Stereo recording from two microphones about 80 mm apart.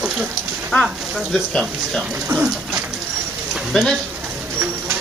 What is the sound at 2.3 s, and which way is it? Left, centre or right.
Speech, right.